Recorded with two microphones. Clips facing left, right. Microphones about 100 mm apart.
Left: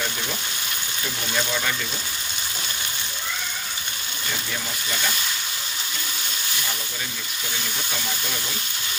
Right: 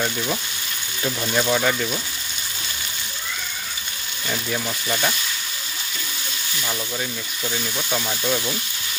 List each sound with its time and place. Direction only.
1.3 s speech: 45° right (ahead or behind)